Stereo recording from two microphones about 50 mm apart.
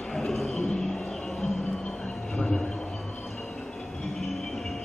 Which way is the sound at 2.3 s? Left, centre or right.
Centre.